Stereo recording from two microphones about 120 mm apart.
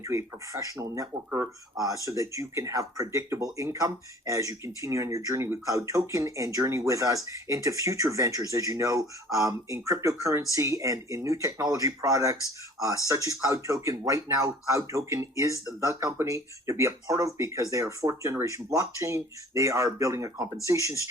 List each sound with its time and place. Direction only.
0.0 s speech: 25° right (ahead or behind)
1.8 s speech: 30° right (ahead or behind)